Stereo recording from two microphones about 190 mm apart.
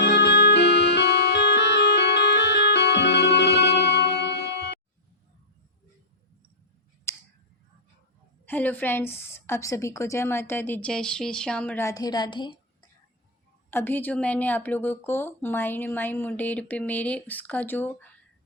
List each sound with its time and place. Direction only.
0.0 s music: 60° left (ahead or behind)
7.1 s a sound: 15° left (ahead or behind)
8.4 s a woman's voice: 10° left (ahead or behind); by 12.5 s 25° left (ahead or behind)
13.7 s a woman's voice: 10° left (ahead or behind)